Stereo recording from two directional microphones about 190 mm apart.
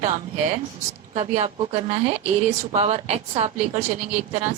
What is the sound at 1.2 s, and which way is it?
A woman's voice, 30° right (ahead or behind).